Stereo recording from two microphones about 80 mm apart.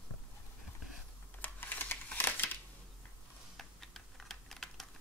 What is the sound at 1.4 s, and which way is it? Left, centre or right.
Typing, left.